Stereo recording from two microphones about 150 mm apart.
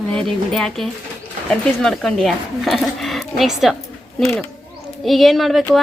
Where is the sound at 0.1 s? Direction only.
5° left (ahead or behind).